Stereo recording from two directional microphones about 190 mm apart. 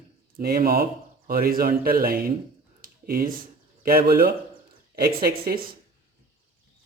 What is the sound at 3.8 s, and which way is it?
A man's voice, 50° right (ahead or behind).